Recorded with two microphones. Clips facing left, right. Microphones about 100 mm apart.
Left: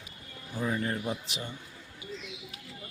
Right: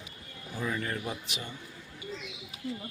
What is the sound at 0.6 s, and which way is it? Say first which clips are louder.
Speech: left 2 dB; 25° left (ahead or behind).